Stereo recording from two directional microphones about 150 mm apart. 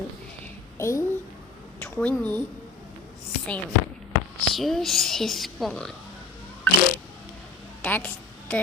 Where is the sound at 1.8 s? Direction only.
10° left (ahead or behind).